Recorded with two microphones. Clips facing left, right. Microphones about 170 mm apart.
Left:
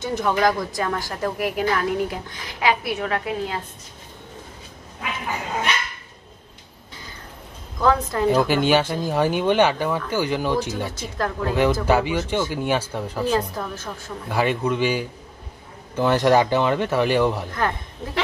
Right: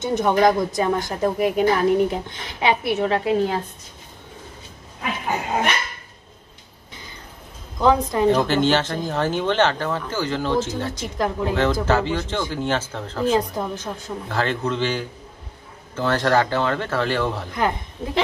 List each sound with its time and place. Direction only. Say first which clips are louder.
0.0 s a woman's voice: right 3 dB; 20° right (ahead or behind)
7.8 s a woman's voice: right 2 dB; 20° right (ahead or behind)
8.3 s speech: left 1 dB; 10° left (ahead or behind)
11.0 s a woman's voice: right 2 dB; 15° right (ahead or behind)
11.8 s speech: left 1 dB; 15° left (ahead or behind)
13.3 s a woman's voice: right 4 dB; 15° right (ahead or behind)
14.3 s speech: left 2 dB; 10° left (ahead or behind)
17.6 s a woman's voice: right 2 dB; 20° right (ahead or behind)